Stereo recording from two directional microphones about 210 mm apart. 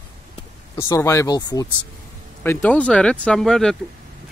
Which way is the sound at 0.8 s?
15° left (ahead or behind).